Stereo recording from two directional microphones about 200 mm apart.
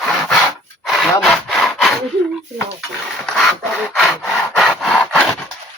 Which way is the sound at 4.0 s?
Centre (ahead or behind).